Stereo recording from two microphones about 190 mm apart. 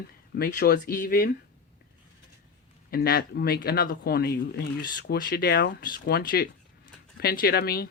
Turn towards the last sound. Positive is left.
turn(degrees=55)  # may be behind; listen again after turning